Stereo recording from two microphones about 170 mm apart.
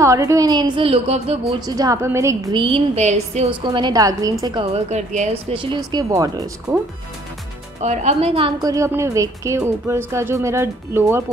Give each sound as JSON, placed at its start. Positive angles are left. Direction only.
{"t": 0.0, "sound": "a woman's voice", "side_deg": -20}
{"t": 1.7, "sound": "a woman's voice", "side_deg": -20}
{"t": 2.6, "sound": "a woman's voice", "side_deg": -35}
{"t": 3.6, "sound": "a woman's voice", "side_deg": -25}
{"t": 4.7, "sound": "a woman's voice", "side_deg": -40}
{"t": 5.5, "sound": "a woman's voice", "side_deg": -30}
{"t": 7.8, "sound": "a woman's voice", "side_deg": -40}
{"t": 8.5, "sound": "speech", "side_deg": -20}